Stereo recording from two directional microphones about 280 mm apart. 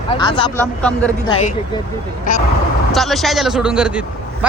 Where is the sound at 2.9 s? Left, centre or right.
Centre.